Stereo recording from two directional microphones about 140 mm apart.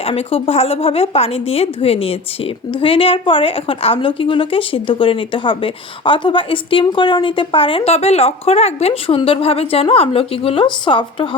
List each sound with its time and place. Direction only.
0.0 s a woman's voice: 45° left (ahead or behind)